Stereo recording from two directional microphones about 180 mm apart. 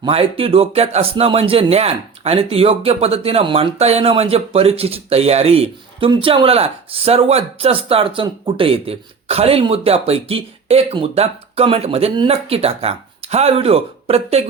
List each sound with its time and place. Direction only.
0.0 s speech: 30° right (ahead or behind)